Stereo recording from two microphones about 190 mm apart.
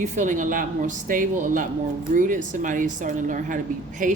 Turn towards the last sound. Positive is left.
turn(degrees=-45)  # may be behind; listen again after turning